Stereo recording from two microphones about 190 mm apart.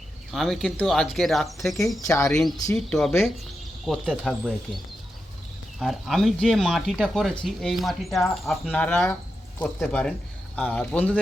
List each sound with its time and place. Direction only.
0.3 s speech: centre (ahead or behind)
2.0 s speech: 15° left (ahead or behind)
2.7 s speech: centre (ahead or behind)
5.8 s speech: centre (ahead or behind)